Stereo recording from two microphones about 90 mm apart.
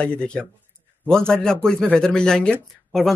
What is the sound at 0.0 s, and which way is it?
Speech, 10° left (ahead or behind).